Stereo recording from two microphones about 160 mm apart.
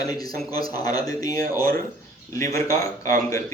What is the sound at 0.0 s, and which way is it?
Speech, 25° left (ahead or behind).